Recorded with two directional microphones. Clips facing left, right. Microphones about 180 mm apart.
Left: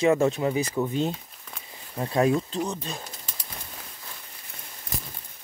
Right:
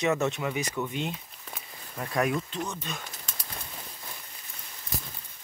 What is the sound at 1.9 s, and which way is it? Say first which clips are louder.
Speech: left 5 dB; 25° left (ahead or behind).